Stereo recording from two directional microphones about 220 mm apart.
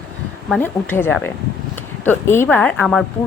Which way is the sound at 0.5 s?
10° left (ahead or behind).